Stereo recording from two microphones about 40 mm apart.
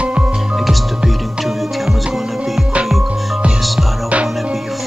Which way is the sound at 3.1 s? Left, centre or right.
Centre.